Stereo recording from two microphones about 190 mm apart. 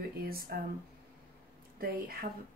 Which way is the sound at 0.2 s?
50° right (ahead or behind).